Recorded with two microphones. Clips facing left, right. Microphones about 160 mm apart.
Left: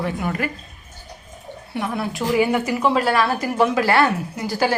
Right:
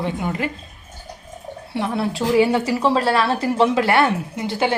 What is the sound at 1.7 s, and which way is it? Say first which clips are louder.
A woman's voice: right 3 dB; 30° right (ahead or behind).